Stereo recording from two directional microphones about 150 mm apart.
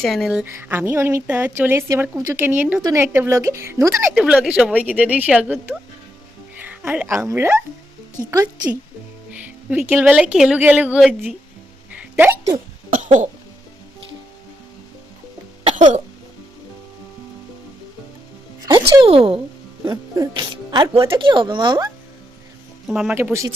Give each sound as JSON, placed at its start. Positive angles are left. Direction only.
{"t": 0.0, "sound": "speech", "side_deg": 0}
{"t": 4.2, "sound": "speech", "side_deg": -5}
{"t": 6.7, "sound": "speech", "side_deg": -10}
{"t": 9.4, "sound": "speech", "side_deg": -10}
{"t": 11.9, "sound": "a sound", "side_deg": -10}
{"t": 12.9, "sound": "cough", "side_deg": -60}
{"t": 18.6, "sound": "speech", "side_deg": -25}
{"t": 19.8, "sound": "speech", "side_deg": -30}
{"t": 22.9, "sound": "speech", "side_deg": -5}
{"t": 23.1, "sound": "speech", "side_deg": -15}